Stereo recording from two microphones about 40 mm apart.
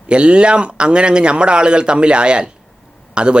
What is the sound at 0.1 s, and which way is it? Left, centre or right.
Speech, right.